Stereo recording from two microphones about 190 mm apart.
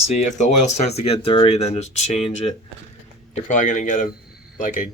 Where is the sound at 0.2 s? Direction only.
40° left (ahead or behind).